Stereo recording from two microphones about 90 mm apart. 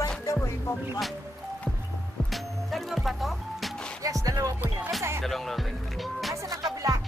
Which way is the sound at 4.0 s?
40° right (ahead or behind).